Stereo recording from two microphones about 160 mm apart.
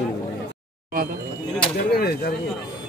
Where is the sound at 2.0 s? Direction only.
80° left.